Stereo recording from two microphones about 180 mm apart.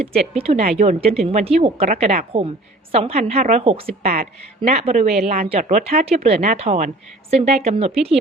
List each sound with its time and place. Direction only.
0.0 s speech: 35° right (ahead or behind)